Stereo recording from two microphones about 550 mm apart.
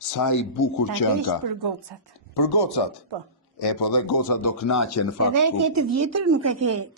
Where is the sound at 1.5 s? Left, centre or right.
Right.